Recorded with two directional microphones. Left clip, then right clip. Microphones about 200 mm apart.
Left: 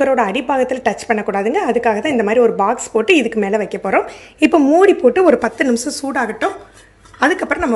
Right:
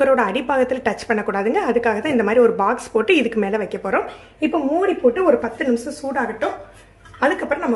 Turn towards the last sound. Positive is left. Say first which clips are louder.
# left 4 dB
turn(degrees=40)  # may be behind; listen again after turning